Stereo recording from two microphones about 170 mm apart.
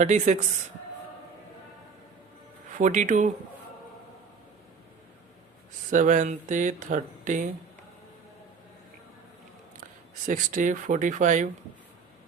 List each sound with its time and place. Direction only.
0.0 s speech: 45° right (ahead or behind)
2.7 s speech: 45° right (ahead or behind)
5.9 s speech: 50° right (ahead or behind)
10.2 s speech: 50° right (ahead or behind)